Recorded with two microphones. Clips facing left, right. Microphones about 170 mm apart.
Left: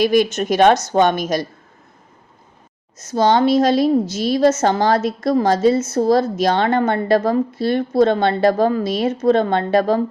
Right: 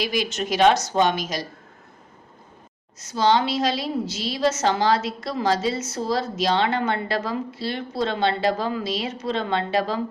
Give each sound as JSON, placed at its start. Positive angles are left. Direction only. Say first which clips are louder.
{"t": 0.0, "sound": "a woman's voice", "louder": "left 10 dB", "side_deg": 50}
{"t": 3.0, "sound": "a woman's voice", "louder": "left 5 dB", "side_deg": 45}